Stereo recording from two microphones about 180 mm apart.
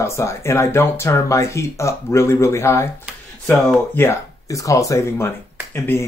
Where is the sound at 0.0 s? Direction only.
15° left (ahead or behind).